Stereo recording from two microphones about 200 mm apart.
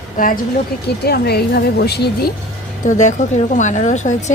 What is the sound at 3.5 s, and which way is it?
Speech, 40° left (ahead or behind).